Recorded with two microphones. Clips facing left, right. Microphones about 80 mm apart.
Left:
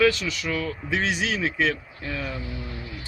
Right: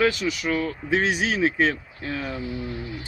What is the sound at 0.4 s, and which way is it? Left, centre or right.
Speech, right.